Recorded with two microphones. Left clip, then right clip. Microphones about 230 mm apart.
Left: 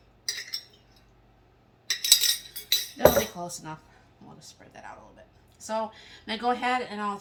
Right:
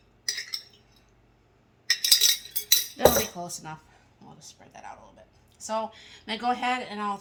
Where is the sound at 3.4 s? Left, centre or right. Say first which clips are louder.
Even; right.